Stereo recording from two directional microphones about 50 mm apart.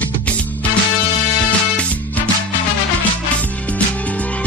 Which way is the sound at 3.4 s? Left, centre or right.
Left.